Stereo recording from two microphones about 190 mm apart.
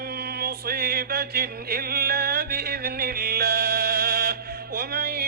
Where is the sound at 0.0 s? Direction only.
55° right (ahead or behind).